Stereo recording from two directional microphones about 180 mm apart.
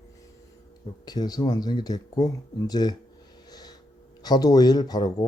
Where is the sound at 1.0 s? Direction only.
20° left (ahead or behind).